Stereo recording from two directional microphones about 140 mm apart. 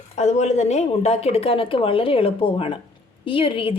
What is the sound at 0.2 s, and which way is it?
A woman's voice, 55° left (ahead or behind).